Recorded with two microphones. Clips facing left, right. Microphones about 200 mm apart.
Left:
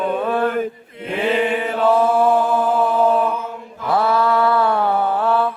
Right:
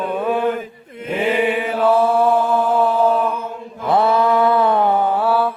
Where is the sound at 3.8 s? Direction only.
25° right (ahead or behind); by 5.4 s 5° right (ahead or behind).